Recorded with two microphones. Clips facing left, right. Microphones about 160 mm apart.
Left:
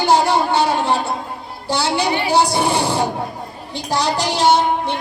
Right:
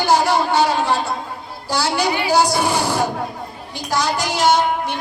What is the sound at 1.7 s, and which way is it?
A woman's voice, 25° left (ahead or behind).